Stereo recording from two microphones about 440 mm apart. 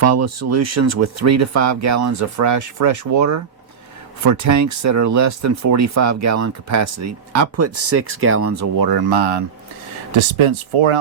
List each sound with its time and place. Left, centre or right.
0.0 s speech: right
8.8 s speech: right
10.2 s speech: right